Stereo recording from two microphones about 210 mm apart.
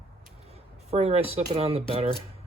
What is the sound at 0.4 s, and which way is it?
Speech, 30° right (ahead or behind).